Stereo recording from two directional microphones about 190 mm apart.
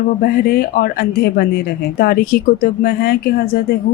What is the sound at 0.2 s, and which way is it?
A woman's voice, 50° left (ahead or behind).